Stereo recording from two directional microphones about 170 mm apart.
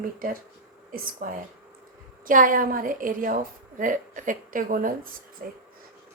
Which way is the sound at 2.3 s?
50° right (ahead or behind).